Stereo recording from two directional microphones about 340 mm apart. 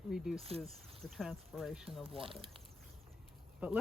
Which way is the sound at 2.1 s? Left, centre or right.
Centre.